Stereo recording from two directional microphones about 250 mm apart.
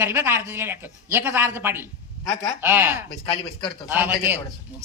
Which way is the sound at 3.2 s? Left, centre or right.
Left.